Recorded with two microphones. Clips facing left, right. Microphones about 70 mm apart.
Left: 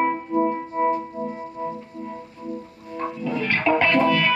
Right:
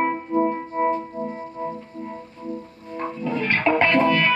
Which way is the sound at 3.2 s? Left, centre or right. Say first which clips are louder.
Right 1 dB; right.